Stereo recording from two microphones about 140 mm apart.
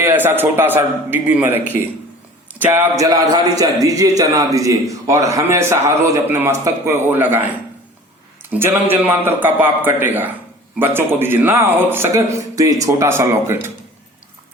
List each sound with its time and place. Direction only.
0.0 s a man's voice: 15° right (ahead or behind)
8.5 s a man's voice: 15° right (ahead or behind)